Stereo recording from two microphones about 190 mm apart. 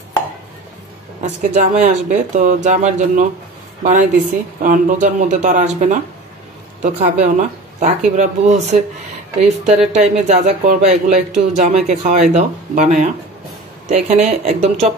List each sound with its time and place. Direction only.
1.2 s speech: 40° right (ahead or behind)
9.9 s speech: 35° right (ahead or behind)